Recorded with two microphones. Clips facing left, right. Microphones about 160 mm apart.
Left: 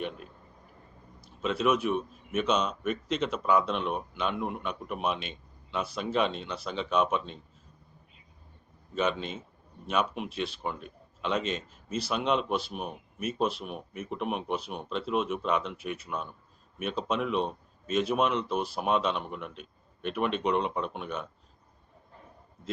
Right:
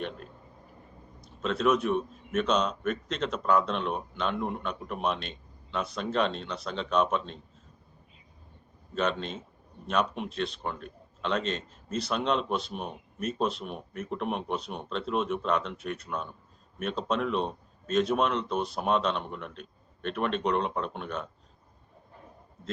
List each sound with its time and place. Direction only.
1.2 s speech: 5° left (ahead or behind)
9.0 s speech: 5° left (ahead or behind)